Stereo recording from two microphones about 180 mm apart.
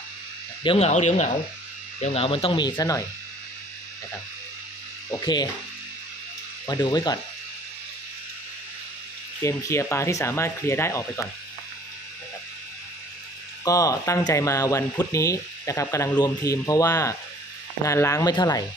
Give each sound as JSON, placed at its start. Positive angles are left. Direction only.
{"t": 0.7, "sound": "speech", "side_deg": 40}
{"t": 5.2, "sound": "speech", "side_deg": 25}
{"t": 6.6, "sound": "speech", "side_deg": 20}
{"t": 9.4, "sound": "speech", "side_deg": 15}
{"t": 13.7, "sound": "speech", "side_deg": 20}